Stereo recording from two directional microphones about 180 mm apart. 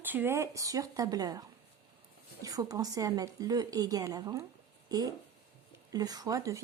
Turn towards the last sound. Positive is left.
turn(degrees=-20)  # may be behind; listen again after turning